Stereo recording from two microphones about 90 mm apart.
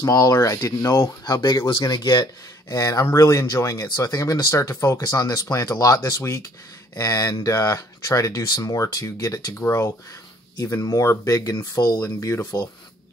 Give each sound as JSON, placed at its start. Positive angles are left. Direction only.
{"t": 0.0, "sound": "speech", "side_deg": 40}